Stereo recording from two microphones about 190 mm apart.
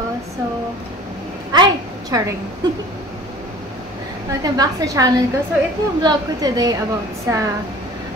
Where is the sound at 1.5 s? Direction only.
20° right (ahead or behind).